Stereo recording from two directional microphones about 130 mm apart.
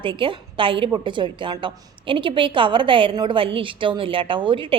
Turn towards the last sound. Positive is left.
turn(degrees=-40)  # may be behind; listen again after turning